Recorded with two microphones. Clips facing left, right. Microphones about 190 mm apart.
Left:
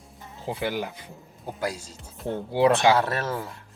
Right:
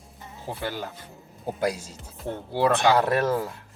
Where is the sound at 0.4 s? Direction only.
15° left (ahead or behind).